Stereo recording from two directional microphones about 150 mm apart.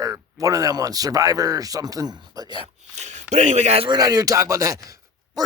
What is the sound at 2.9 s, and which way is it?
Speech, 50° right (ahead or behind).